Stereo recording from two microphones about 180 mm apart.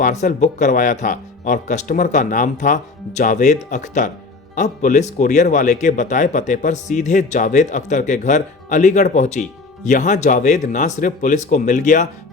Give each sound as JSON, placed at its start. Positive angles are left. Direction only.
{"t": 0.0, "sound": "speech", "side_deg": 45}